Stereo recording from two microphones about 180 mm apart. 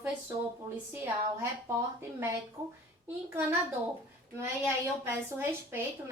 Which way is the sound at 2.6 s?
15° right (ahead or behind).